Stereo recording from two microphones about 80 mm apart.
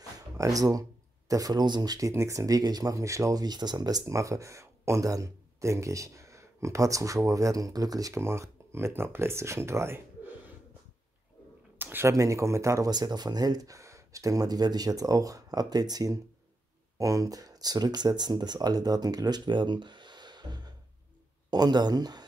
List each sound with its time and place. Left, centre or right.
0.4 s speech: right
8.2 s speech: right
11.8 s a sound: right
12.1 s speech: right
12.9 s speech: right